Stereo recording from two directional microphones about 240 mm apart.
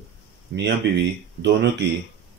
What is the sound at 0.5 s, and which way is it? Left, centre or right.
Speech, right.